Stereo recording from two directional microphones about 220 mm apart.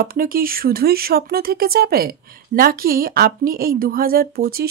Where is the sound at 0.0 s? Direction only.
40° right (ahead or behind).